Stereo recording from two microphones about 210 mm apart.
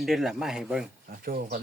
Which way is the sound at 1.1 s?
45° right (ahead or behind).